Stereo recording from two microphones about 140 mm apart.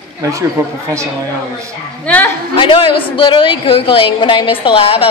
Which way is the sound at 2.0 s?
10° left (ahead or behind).